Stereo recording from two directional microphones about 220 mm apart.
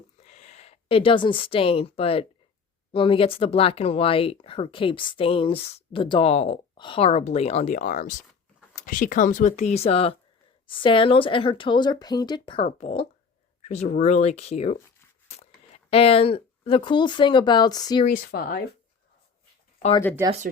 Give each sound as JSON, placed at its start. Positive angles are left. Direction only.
{"t": 0.2, "sound": "speech", "side_deg": 30}
{"t": 15.3, "sound": "a sound", "side_deg": 30}
{"t": 15.9, "sound": "speech", "side_deg": 25}
{"t": 18.3, "sound": "speech", "side_deg": 45}